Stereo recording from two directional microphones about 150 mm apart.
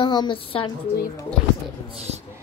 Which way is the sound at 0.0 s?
30° left (ahead or behind).